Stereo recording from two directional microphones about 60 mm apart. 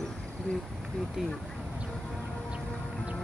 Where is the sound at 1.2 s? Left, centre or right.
Centre.